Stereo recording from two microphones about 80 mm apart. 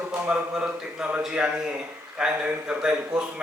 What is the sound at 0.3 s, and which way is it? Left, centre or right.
A man's voice, centre.